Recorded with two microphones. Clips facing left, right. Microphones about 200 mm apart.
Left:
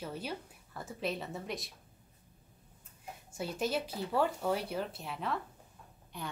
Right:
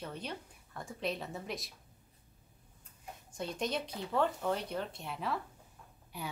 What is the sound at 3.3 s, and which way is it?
A woman's voice, 5° left (ahead or behind).